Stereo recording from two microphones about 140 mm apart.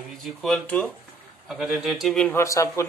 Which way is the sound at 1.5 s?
5° right (ahead or behind).